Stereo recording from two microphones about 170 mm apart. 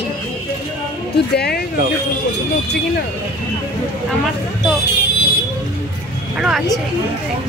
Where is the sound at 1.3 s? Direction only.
70° left (ahead or behind).